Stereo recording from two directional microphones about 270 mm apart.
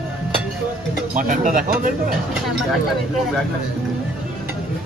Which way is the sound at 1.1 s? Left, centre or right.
Right.